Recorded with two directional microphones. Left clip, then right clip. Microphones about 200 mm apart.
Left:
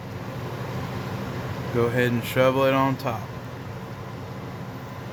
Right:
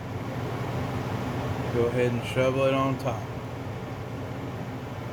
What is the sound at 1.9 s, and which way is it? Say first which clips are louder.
Speech: left 3 dB; 45° left (ahead or behind).